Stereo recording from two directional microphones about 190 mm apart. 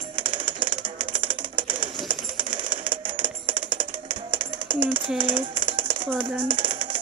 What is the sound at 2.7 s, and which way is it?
Music, 25° right (ahead or behind).